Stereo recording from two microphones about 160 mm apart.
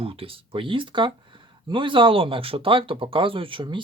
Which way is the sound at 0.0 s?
35° right (ahead or behind).